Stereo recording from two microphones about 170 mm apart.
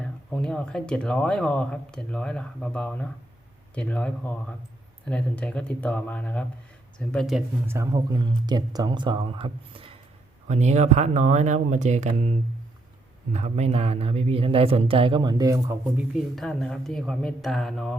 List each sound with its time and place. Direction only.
0.0 s speech: 5° left (ahead or behind)
7.7 s speech: 20° right (ahead or behind); by 12.1 s 45° right (ahead or behind)
13.3 s speech: 40° right (ahead or behind); by 16.0 s 15° right (ahead or behind)
16.1 s speech: centre (ahead or behind)